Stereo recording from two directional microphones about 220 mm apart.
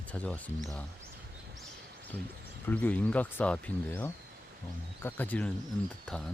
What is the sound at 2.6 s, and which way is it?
Speech, 5° left (ahead or behind).